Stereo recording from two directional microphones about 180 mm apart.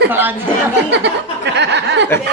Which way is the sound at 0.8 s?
75° right (ahead or behind).